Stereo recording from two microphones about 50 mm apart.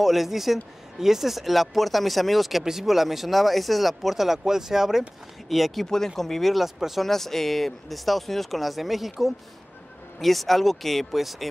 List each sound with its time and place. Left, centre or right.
0.0 s speech: centre
10.1 s speech: centre